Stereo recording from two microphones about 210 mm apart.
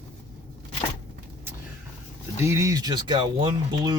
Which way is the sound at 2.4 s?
15° right (ahead or behind).